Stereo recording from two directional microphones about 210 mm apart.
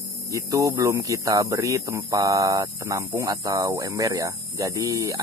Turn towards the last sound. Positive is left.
turn(degrees=-15)  # may be behind; listen again after turning